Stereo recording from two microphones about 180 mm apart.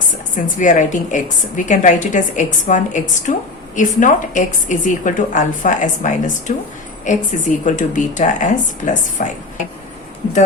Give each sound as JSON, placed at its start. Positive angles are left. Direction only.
{"t": 0.3, "sound": "a woman's voice", "side_deg": 45}